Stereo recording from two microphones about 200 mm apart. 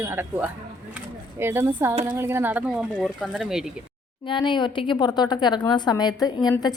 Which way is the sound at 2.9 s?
5° left (ahead or behind).